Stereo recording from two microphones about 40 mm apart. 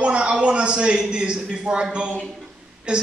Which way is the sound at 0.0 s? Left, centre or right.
Right.